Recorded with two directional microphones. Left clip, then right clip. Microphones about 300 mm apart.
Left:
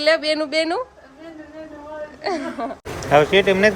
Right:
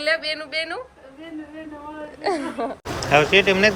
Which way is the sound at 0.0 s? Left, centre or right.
Centre.